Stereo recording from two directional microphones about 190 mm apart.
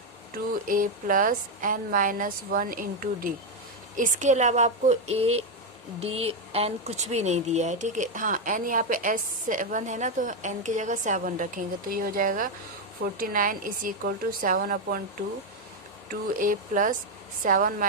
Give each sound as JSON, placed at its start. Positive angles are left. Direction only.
{"t": 0.7, "sound": "speech", "side_deg": -45}
{"t": 16.0, "sound": "speech", "side_deg": -45}